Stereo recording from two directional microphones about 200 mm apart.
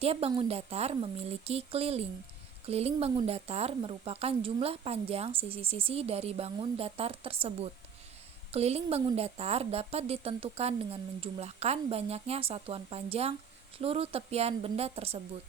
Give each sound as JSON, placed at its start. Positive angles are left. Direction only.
{"t": 0.0, "sound": "a woman's voice", "side_deg": -30}